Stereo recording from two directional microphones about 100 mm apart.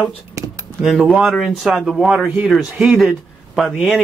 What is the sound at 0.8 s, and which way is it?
Speech, centre (ahead or behind).